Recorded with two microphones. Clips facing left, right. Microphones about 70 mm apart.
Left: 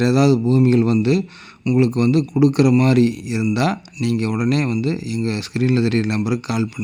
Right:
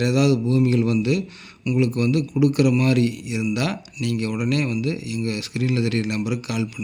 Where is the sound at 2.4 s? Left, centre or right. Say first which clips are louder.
Left 4 dB; left.